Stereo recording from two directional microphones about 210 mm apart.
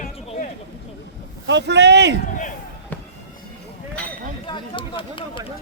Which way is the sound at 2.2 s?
35° left (ahead or behind).